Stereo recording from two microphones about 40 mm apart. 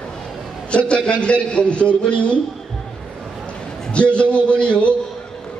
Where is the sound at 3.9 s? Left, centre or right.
Left.